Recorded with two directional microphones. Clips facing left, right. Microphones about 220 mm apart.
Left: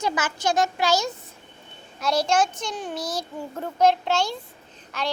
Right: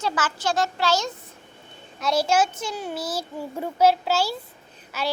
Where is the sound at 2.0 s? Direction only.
Centre (ahead or behind).